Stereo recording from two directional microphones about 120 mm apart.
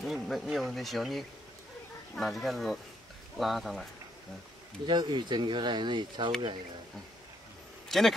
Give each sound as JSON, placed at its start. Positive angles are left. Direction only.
{"t": 0.0, "sound": "speech", "side_deg": 0}
{"t": 4.8, "sound": "speech", "side_deg": -40}
{"t": 7.9, "sound": "speech", "side_deg": 0}